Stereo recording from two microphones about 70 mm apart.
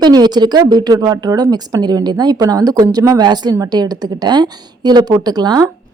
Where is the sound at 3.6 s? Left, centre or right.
Right.